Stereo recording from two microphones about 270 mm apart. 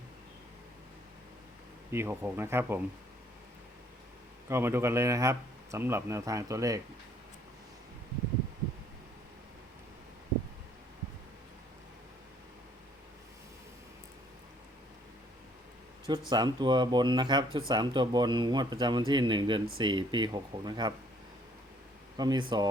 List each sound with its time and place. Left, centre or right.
1.9 s speech: centre
4.4 s speech: centre
16.0 s speech: centre
22.2 s speech: centre